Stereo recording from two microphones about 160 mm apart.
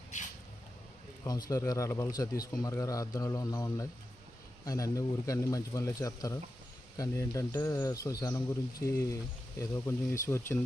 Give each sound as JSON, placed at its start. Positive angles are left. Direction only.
{"t": 1.2, "sound": "speech", "side_deg": 25}